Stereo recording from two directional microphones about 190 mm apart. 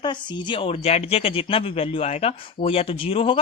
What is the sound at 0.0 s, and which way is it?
Speech, 25° left (ahead or behind).